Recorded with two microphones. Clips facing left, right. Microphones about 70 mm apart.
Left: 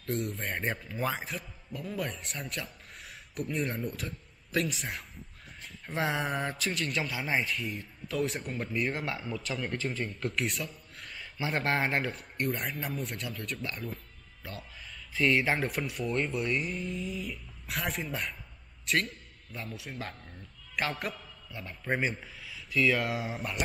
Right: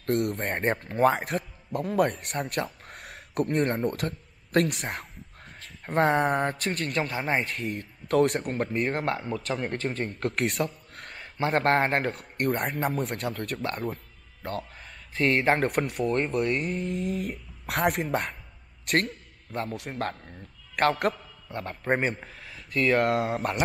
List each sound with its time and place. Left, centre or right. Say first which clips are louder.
0.0 s a man's voice: right 7 dB; right
14.8 s a man's voice: even; right